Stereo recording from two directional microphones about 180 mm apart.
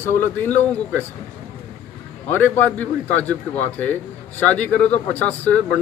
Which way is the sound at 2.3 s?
10° left (ahead or behind).